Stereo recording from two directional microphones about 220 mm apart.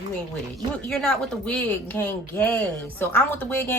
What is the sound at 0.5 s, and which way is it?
Speech, centre (ahead or behind).